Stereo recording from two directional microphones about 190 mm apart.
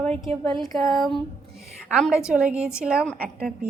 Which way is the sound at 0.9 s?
Centre (ahead or behind).